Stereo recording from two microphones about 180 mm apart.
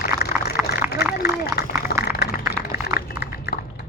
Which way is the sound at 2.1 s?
60° left (ahead or behind).